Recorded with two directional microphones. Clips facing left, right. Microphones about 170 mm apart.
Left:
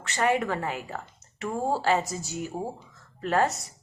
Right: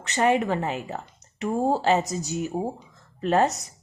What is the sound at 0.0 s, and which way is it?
Speech, 20° right (ahead or behind).